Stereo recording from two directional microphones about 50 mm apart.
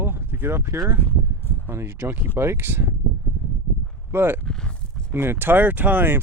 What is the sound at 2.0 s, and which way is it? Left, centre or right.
Speech, right.